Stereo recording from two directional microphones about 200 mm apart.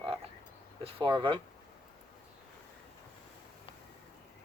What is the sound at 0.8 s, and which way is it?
Speech, 30° right (ahead or behind).